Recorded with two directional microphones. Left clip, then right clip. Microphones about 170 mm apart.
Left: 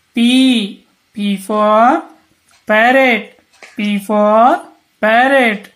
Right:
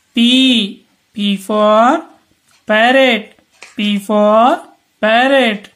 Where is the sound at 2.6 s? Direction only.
15° right (ahead or behind).